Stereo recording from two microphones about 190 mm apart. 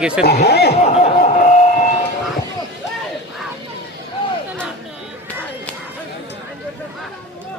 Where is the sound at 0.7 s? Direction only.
35° left (ahead or behind).